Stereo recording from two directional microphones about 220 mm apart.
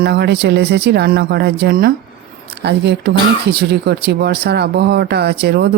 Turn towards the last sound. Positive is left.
turn(degrees=-45)  # may be behind; listen again after turning